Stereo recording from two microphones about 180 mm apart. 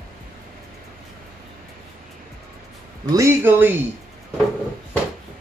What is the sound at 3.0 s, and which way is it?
Speech, 15° right (ahead or behind).